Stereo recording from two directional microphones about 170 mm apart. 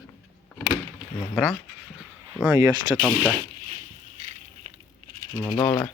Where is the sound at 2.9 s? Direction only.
10° left (ahead or behind).